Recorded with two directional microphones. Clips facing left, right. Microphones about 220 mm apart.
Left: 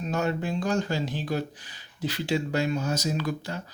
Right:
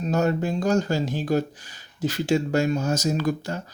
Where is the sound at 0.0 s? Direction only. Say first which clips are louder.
Right 5 dB; 40° right (ahead or behind).